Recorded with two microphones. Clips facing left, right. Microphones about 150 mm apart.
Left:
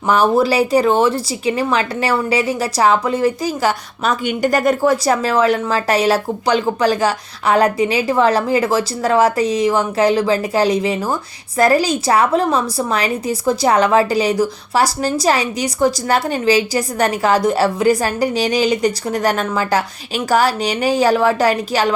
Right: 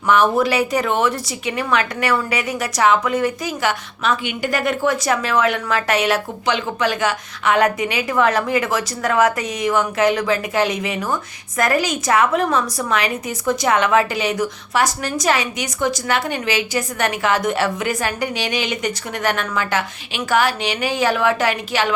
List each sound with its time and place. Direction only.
0.1 s a woman's voice: 35° left (ahead or behind)